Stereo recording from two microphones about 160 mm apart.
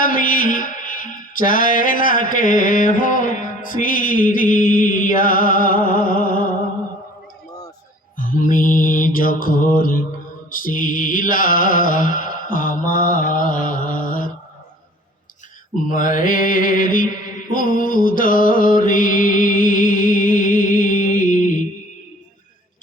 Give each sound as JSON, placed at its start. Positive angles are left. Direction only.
{"t": 0.0, "sound": "mantra", "side_deg": 60}
{"t": 8.1, "sound": "mantra", "side_deg": 60}
{"t": 15.9, "sound": "mantra", "side_deg": 60}